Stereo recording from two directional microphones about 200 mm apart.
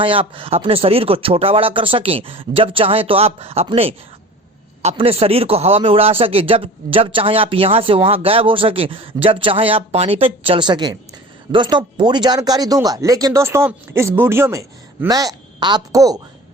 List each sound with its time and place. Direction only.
0.0 s a man's voice: 25° right (ahead or behind)